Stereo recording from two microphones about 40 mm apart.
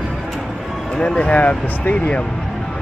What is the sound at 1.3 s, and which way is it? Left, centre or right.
Speech, left.